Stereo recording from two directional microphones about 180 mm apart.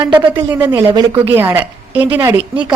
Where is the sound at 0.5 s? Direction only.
10° right (ahead or behind).